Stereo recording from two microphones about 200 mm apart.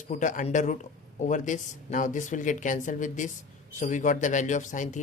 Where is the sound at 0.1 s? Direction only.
40° left (ahead or behind).